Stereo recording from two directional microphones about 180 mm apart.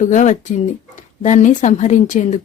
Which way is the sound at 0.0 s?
40° left (ahead or behind).